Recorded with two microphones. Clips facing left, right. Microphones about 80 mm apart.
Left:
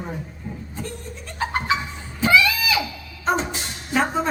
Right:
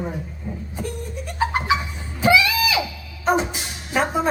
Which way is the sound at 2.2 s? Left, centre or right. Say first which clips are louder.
Right 1 dB; centre.